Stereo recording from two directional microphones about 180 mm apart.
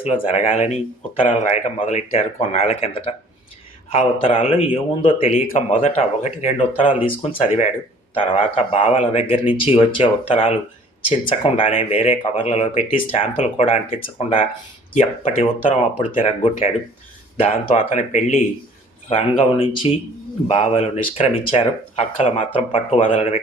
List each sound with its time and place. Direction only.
0.0 s a man's voice: 35° left (ahead or behind)
5.5 s a man's voice: 45° left (ahead or behind)
11.6 s a man's voice: 30° left (ahead or behind)
17.9 s a man's voice: 40° left (ahead or behind)